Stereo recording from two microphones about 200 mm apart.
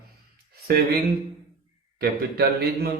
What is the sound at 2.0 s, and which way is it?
Speech, 55° right (ahead or behind).